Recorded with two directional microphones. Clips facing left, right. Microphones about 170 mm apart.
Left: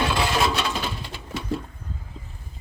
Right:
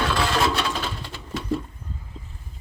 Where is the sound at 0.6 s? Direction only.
5° left (ahead or behind).